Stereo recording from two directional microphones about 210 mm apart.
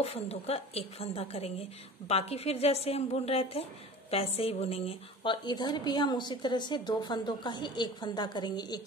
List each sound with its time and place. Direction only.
0.0 s a woman's voice: 30° left (ahead or behind)